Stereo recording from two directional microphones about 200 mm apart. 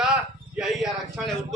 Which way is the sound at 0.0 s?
5° right (ahead or behind).